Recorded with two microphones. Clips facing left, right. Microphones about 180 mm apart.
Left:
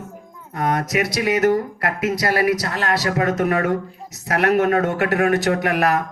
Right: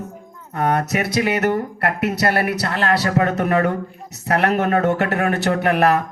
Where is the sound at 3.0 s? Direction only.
35° right (ahead or behind).